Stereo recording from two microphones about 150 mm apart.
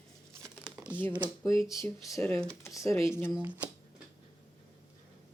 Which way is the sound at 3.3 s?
10° right (ahead or behind).